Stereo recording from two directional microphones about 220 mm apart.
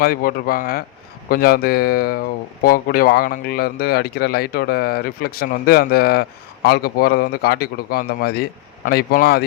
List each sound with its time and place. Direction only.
0.0 s speech: 40° left (ahead or behind)